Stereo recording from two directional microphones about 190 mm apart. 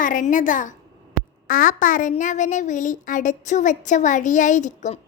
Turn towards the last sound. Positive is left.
turn(degrees=40)  # may be behind; listen again after turning